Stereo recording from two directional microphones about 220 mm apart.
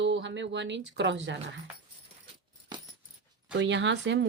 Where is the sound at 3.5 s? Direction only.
55° right (ahead or behind).